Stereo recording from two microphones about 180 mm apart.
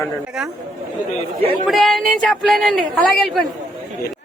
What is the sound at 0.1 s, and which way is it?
Speech, 5° right (ahead or behind).